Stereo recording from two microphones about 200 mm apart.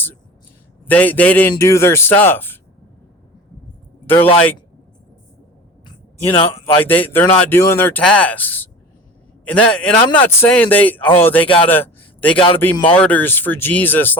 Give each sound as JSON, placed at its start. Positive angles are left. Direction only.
{"t": 0.9, "sound": "speech", "side_deg": 10}
{"t": 4.0, "sound": "speech", "side_deg": 10}
{"t": 5.8, "sound": "a sound", "side_deg": 25}
{"t": 6.8, "sound": "speech", "side_deg": 10}
{"t": 11.4, "sound": "speech", "side_deg": 25}
{"t": 11.7, "sound": "a sound", "side_deg": 10}
{"t": 12.9, "sound": "speech", "side_deg": 5}